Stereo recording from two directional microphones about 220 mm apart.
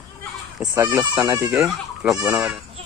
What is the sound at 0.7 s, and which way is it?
Speech, 10° right (ahead or behind).